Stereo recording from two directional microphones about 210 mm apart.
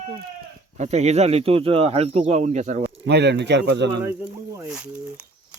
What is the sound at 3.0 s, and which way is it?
Speech, 55° right (ahead or behind).